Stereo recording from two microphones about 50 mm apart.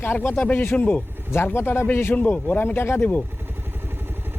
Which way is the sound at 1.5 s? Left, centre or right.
Left.